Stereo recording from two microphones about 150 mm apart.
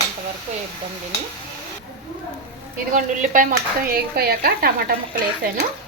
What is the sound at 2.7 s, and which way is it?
Speech, 65° right (ahead or behind).